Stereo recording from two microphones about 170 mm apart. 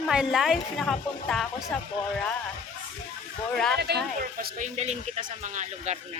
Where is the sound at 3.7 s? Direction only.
70° right (ahead or behind).